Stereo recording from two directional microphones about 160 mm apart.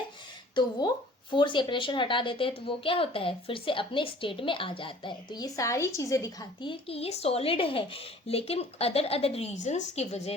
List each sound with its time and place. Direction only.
0.6 s a woman's voice: 30° left (ahead or behind)
6.7 s speech: 35° left (ahead or behind)